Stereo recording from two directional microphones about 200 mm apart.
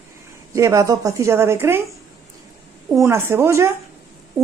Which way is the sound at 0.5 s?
15° right (ahead or behind).